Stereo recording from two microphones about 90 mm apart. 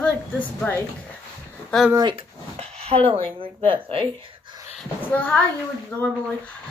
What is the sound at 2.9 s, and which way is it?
Speech, 90° right.